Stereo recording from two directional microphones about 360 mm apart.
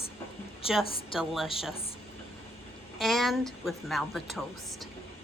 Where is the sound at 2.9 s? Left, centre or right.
Centre.